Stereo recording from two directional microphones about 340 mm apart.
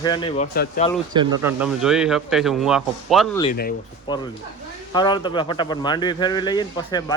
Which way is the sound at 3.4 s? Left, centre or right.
Left.